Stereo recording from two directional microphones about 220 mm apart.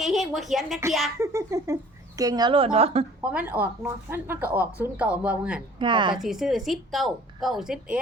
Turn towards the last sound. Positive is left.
turn(degrees=-5)  # may be behind; listen again after turning